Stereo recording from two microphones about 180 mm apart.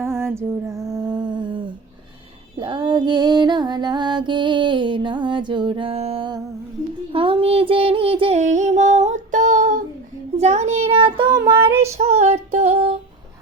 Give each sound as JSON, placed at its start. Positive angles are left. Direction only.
{"t": 0.0, "sound": "humming", "side_deg": -15}
{"t": 2.6, "sound": "music", "side_deg": -25}
{"t": 10.3, "sound": "a child's voice", "side_deg": -40}
{"t": 11.4, "sound": "music", "side_deg": -30}
{"t": 11.7, "sound": "child singing", "side_deg": -15}
{"t": 11.9, "sound": "female singing", "side_deg": -35}